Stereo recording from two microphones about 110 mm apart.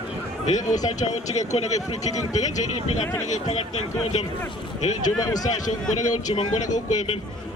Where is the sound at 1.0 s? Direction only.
90° left.